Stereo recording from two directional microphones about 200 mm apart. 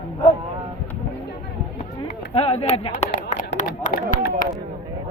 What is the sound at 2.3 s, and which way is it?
Speech, 30° left (ahead or behind).